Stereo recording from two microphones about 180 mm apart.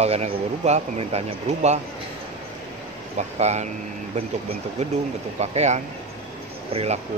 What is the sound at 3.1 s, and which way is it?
Speech, 40° right (ahead or behind).